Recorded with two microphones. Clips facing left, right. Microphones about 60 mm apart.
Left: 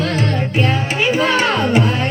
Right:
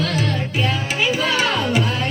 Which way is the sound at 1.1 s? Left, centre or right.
Left.